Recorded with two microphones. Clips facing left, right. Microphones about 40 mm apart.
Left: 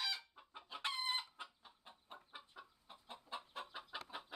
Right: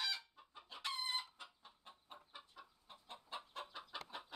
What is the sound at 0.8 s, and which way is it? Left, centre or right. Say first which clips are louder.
Chicken: left 2 dB; centre.